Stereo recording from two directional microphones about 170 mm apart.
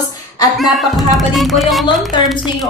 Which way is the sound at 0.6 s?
Centre (ahead or behind).